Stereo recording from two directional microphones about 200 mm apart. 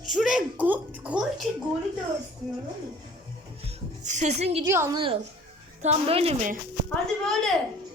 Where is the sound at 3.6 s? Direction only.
35° right (ahead or behind).